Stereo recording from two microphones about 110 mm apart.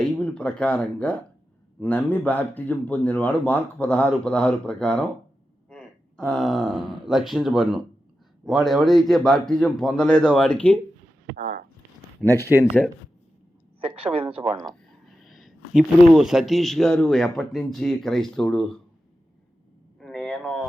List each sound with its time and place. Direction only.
0.0 s a man's voice: 10° left (ahead or behind)
12.2 s speech: 10° left (ahead or behind)
13.8 s speech: 60° right (ahead or behind)
14.6 s speech: centre (ahead or behind)
20.0 s a sound: 5° left (ahead or behind)